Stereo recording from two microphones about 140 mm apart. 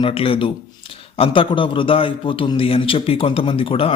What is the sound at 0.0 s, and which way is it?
A man's voice, 40° left (ahead or behind).